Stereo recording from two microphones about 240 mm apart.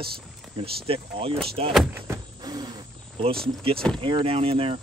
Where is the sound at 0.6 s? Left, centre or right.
Right.